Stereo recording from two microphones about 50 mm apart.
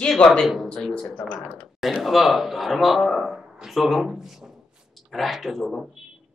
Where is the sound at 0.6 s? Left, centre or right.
Centre.